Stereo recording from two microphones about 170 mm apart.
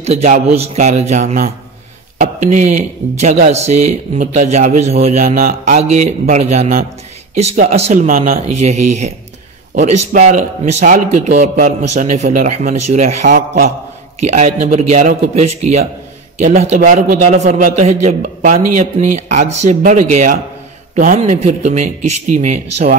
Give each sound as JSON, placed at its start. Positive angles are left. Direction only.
{"t": 0.0, "sound": "a man's voice", "side_deg": -40}
{"t": 8.1, "sound": "speech", "side_deg": -55}
{"t": 8.5, "sound": "a man's voice", "side_deg": -40}